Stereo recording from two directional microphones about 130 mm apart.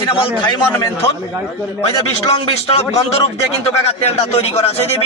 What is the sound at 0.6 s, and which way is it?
Speech, 15° left (ahead or behind).